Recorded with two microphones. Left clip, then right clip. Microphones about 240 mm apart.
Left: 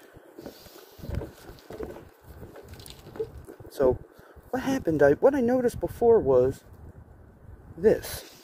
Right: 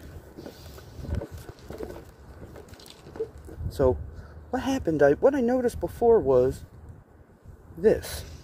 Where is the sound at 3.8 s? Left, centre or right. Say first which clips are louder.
Even; centre.